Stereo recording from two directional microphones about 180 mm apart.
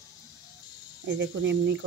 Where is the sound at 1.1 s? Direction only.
80° right.